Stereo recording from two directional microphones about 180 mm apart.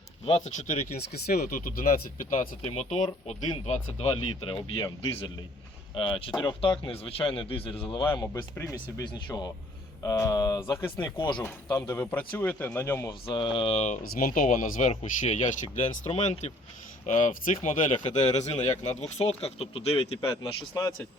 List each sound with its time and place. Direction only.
0.3 s speech: 40° left (ahead or behind)
0.9 s speech: 60° left (ahead or behind)
2.6 s speech: 35° left (ahead or behind)
8.1 s speech: 15° left (ahead or behind)
13.2 s speech: 30° left (ahead or behind)
20.4 s speech: 20° left (ahead or behind)